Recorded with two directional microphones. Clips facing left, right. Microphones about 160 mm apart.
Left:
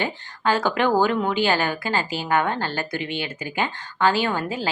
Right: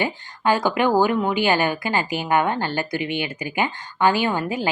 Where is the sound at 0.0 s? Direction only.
10° right (ahead or behind).